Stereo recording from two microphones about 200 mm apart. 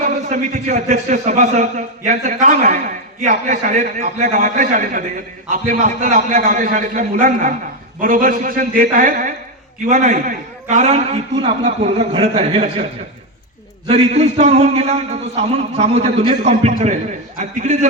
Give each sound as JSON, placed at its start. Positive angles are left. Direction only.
{"t": 0.0, "sound": "a man's voice", "side_deg": -35}
{"t": 13.8, "sound": "a man's voice", "side_deg": -30}